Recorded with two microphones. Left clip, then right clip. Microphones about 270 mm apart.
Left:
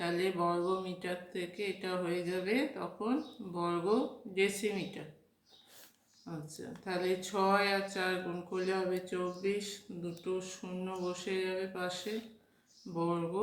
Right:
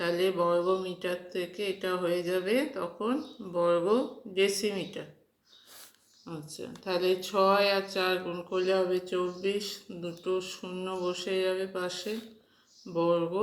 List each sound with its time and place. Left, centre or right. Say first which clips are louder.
0.0 s speech: right 5 dB; centre
6.2 s speech: right 4 dB; centre